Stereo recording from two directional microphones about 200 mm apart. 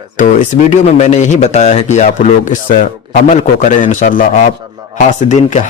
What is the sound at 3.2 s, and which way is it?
Speech, 40° left (ahead or behind).